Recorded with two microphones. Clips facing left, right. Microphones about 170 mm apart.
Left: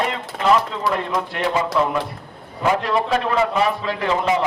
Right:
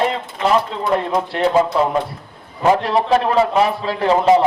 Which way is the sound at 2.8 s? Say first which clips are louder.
Right 4 dB; 30° right (ahead or behind).